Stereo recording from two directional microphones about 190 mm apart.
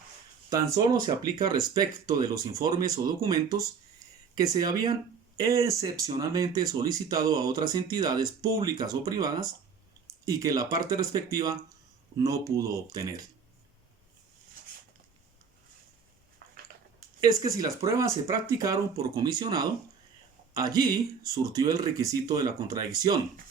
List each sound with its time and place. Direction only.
0.5 s speech: 15° right (ahead or behind)
14.6 s a sound: 50° right (ahead or behind)
17.2 s speech: 20° right (ahead or behind)